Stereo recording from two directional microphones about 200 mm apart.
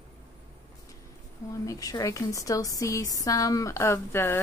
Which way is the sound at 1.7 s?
20° left (ahead or behind).